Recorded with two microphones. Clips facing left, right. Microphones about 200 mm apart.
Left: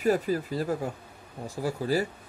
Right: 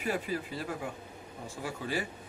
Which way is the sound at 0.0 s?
40° left (ahead or behind).